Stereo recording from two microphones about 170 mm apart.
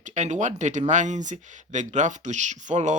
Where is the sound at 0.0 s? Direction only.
45° right (ahead or behind).